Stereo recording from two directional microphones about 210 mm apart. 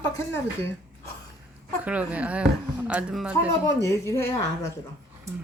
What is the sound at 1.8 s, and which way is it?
Speech, 5° right (ahead or behind).